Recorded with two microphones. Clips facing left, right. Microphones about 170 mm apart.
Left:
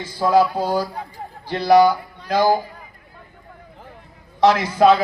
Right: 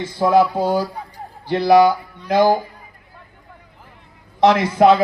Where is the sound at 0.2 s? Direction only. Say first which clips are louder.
Right 2 dB; 20° right (ahead or behind).